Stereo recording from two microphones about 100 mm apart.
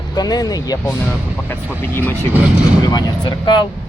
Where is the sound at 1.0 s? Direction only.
20° left (ahead or behind).